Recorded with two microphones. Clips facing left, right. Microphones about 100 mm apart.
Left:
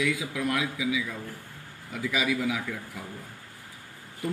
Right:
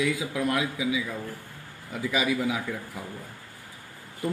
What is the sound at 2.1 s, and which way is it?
Speech, 35° right (ahead or behind).